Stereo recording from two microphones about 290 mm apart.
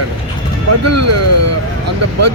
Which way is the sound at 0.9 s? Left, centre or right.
Right.